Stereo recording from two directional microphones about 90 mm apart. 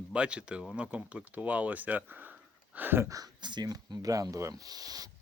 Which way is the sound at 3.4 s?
50° right (ahead or behind).